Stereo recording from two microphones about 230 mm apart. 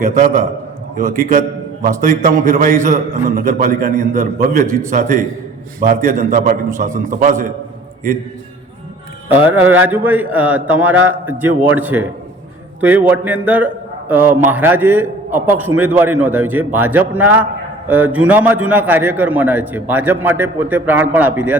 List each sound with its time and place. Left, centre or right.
0.0 s a man's voice: right
9.5 s a man's voice: centre